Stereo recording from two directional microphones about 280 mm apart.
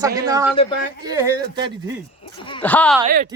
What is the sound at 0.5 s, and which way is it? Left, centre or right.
Speech, left.